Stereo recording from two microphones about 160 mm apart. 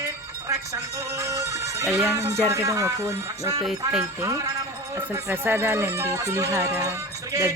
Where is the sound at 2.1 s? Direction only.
20° right (ahead or behind).